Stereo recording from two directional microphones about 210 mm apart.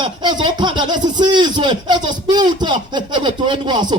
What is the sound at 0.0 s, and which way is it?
Speech, 20° right (ahead or behind).